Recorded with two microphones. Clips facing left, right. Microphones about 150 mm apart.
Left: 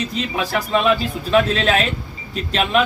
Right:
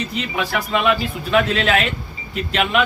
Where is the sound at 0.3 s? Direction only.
30° left (ahead or behind).